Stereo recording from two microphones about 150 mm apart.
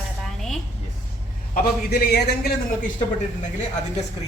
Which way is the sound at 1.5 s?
90° left.